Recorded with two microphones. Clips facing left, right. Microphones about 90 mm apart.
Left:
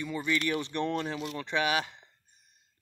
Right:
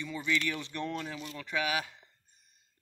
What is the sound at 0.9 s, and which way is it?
Speech, 50° left (ahead or behind).